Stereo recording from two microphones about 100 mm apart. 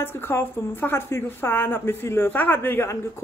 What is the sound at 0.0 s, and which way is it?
A woman's voice, 25° left (ahead or behind).